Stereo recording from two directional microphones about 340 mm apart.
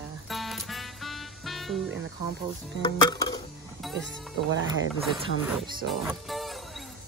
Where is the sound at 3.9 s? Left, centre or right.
Right.